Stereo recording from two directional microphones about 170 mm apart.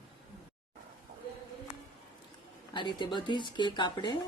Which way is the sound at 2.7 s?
25° left (ahead or behind).